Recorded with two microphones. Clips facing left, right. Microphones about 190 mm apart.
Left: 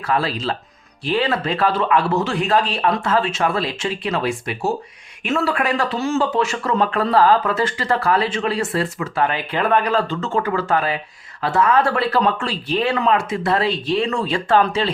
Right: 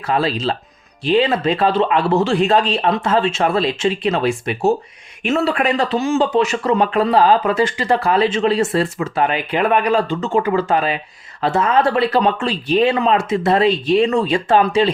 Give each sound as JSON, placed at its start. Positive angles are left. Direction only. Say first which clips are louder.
{"t": 0.1, "sound": "speech", "louder": "right 3 dB", "side_deg": -20}